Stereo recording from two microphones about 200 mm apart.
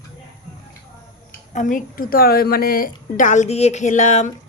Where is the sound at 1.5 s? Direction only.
40° left (ahead or behind).